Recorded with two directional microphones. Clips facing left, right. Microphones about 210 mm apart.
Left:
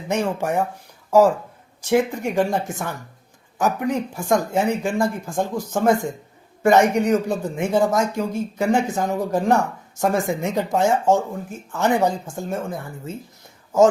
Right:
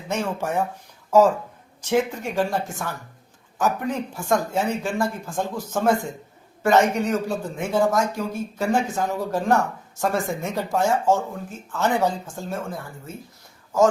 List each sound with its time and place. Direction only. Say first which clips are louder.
0.1 s speech: left 3 dB; 15° left (ahead or behind)
1.8 s speech: left 3 dB; 10° left (ahead or behind)